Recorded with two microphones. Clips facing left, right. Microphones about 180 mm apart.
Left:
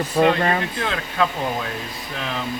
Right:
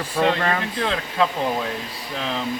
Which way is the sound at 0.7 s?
25° right (ahead or behind).